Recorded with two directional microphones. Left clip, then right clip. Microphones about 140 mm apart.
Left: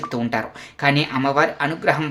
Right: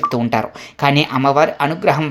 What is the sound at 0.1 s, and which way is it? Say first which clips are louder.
Speech: right 6 dB; 35° right (ahead or behind).